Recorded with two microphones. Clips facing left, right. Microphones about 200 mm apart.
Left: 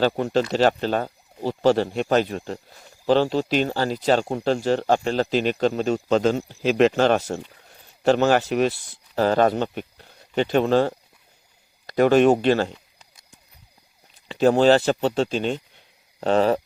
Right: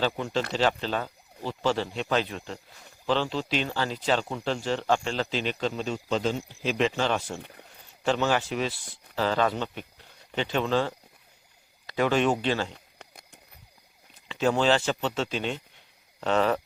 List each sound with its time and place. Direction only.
0.0 s speech: 40° left (ahead or behind)
8.4 s speech: 60° left (ahead or behind)
9.1 s speech: 45° left (ahead or behind)
12.7 s a sound: 55° right (ahead or behind)
14.3 s speech: 40° left (ahead or behind)